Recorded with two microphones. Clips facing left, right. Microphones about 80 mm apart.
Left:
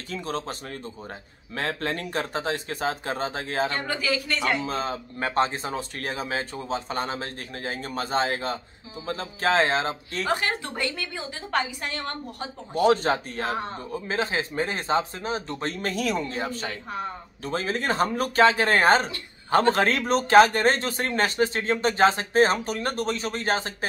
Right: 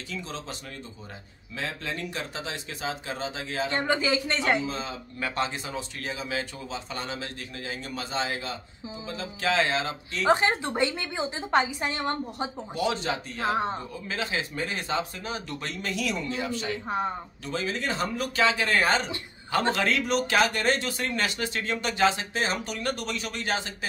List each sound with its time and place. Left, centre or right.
0.1 s speech: left
3.7 s a woman's voice: right
4.6 s speech: left
10.2 s a woman's voice: right
12.7 s speech: left
13.5 s a woman's voice: right
14.0 s speech: left